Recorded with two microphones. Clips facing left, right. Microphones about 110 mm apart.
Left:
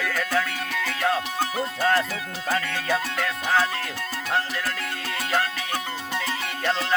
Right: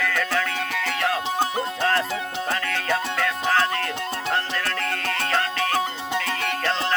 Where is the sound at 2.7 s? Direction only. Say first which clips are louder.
Right 1 dB; 10° left (ahead or behind).